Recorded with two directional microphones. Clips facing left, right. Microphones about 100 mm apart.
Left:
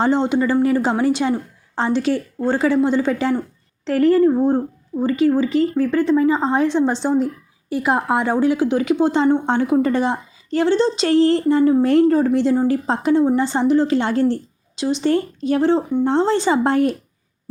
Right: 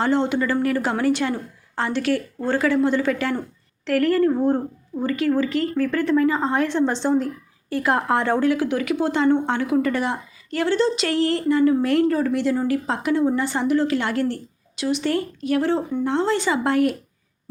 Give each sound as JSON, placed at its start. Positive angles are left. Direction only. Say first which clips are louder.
{"t": 0.0, "sound": "a woman's voice", "louder": "left 3 dB", "side_deg": 20}